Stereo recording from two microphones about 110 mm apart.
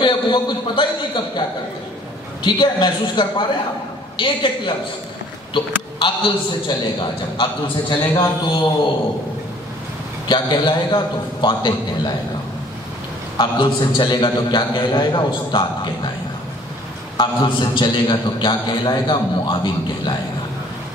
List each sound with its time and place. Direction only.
0.0 s a man's voice: 45° left (ahead or behind)
2.4 s a man's voice: 40° left (ahead or behind)
10.2 s a man's voice: 45° left (ahead or behind)
13.4 s a man's voice: 45° left (ahead or behind)
17.2 s a man's voice: 45° left (ahead or behind)